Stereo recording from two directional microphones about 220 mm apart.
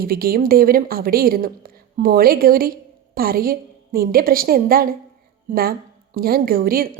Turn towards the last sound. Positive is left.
turn(degrees=-40)  # may be behind; listen again after turning